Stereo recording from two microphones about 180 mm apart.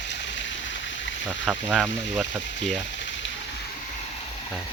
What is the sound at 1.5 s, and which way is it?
Speech, 5° right (ahead or behind).